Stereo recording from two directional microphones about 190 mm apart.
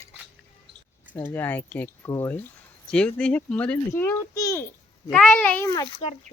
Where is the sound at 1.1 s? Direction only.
10° left (ahead or behind).